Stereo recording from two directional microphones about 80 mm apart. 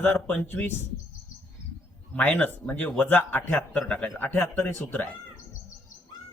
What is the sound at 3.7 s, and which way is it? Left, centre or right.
Speech, centre.